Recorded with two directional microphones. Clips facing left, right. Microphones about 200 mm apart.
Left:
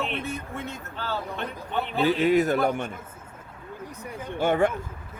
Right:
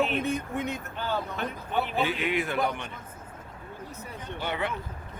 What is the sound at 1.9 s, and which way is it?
Speech, 40° left (ahead or behind).